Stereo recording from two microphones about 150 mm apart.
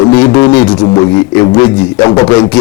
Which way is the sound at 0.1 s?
20° left (ahead or behind).